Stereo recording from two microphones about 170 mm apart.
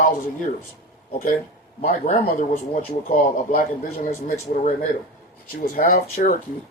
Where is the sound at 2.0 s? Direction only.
45° left (ahead or behind).